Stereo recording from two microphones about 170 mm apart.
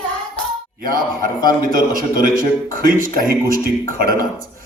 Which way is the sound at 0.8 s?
55° right (ahead or behind).